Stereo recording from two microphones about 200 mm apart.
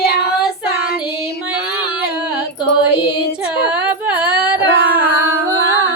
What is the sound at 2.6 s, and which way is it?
Music, 55° left (ahead or behind).